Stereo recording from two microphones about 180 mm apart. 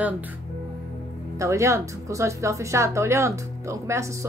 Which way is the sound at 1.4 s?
15° right (ahead or behind).